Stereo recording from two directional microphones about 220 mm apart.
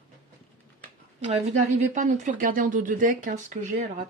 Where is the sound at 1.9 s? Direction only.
35° right (ahead or behind).